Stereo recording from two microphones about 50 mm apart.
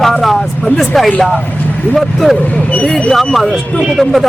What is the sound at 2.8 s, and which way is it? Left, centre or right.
Speech, centre.